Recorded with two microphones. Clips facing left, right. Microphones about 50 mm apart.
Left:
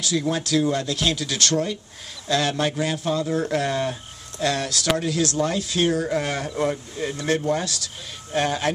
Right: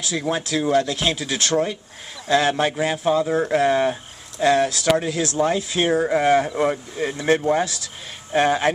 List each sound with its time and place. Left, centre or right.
0.0 s speech: centre